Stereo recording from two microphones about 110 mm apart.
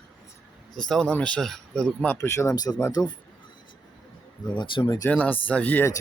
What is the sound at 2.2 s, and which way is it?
Speech, 25° left (ahead or behind).